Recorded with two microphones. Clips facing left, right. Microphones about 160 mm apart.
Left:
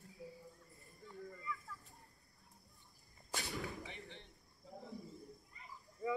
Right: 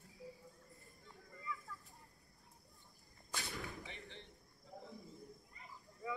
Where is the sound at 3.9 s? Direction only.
20° left (ahead or behind).